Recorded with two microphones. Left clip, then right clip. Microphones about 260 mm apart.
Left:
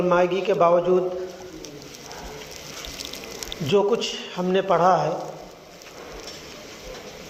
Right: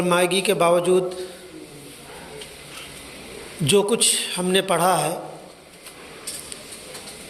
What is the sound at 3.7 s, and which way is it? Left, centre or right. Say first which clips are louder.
Speech: right 2 dB; right.